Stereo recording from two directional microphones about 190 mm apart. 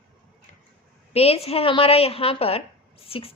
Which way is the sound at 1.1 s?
30° left (ahead or behind).